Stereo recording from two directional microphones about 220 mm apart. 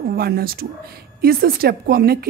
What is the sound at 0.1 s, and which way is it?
A woman's voice, 45° right (ahead or behind).